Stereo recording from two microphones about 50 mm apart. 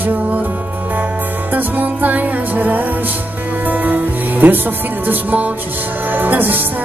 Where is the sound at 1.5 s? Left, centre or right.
Right.